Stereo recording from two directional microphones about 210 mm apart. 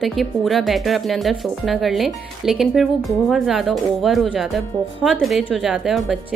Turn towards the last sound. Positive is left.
turn(degrees=0)  # may be behind; listen again after turning